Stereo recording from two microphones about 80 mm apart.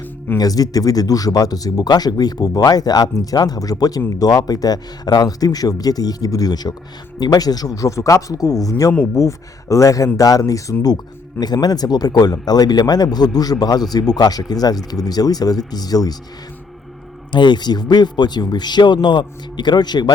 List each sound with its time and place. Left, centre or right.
0.3 s speech: left
10.9 s speech: left
17.3 s speech: left